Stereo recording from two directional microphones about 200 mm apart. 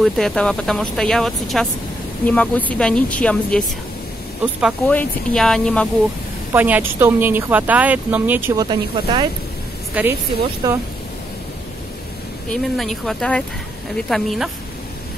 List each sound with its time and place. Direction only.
0.0 s a woman's voice: 5° left (ahead or behind)
4.8 s speech: 5° left (ahead or behind)
6.5 s speech: 10° right (ahead or behind)
9.9 s speech: 5° right (ahead or behind)
10.6 s speech: 20° right (ahead or behind)
12.4 s speech: centre (ahead or behind)